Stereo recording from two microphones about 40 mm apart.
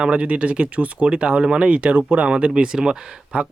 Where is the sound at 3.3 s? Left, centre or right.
Right.